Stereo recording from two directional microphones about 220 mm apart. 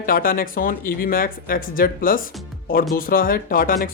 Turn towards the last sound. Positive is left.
turn(degrees=40)  # may be behind; listen again after turning